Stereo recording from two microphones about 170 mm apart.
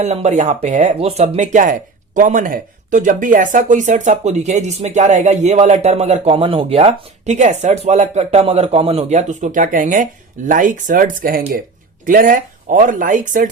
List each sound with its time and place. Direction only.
0.0 s speech: 40° right (ahead or behind)